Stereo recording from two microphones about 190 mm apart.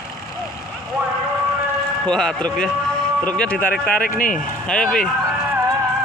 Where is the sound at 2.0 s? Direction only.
5° left (ahead or behind).